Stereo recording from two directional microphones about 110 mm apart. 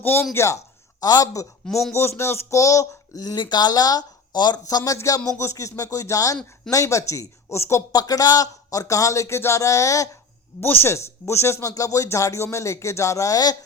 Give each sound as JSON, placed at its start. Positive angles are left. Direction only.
{"t": 0.0, "sound": "speech", "side_deg": 20}
{"t": 1.6, "sound": "speech", "side_deg": 0}
{"t": 1.9, "sound": "speech", "side_deg": 25}
{"t": 4.8, "sound": "speech", "side_deg": 25}